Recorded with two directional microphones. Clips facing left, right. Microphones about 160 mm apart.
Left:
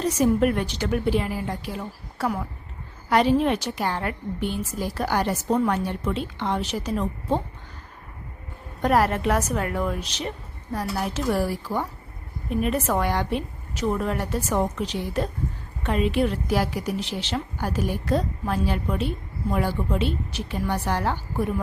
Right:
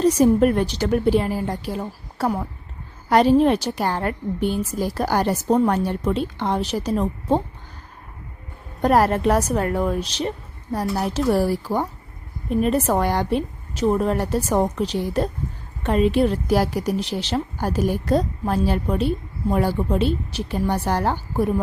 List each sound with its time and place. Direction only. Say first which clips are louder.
0.0 s a woman's voice: right 5 dB; 35° right (ahead or behind)
8.8 s a woman's voice: right 4 dB; 35° right (ahead or behind)